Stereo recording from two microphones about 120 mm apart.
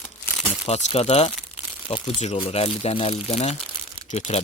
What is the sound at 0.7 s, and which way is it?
Speech, 65° left (ahead or behind).